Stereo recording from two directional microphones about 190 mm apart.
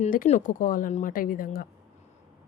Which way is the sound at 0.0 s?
40° left (ahead or behind).